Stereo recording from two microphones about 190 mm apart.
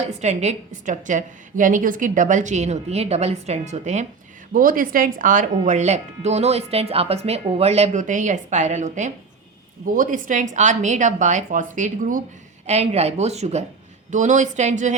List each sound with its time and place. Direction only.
0.0 s speech: 35° right (ahead or behind)